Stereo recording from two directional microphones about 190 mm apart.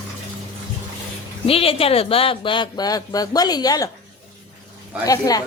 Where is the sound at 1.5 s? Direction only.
30° left (ahead or behind).